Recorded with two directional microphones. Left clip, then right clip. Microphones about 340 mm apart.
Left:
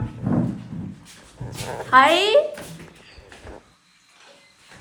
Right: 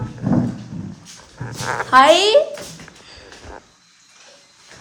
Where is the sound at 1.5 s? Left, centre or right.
Left.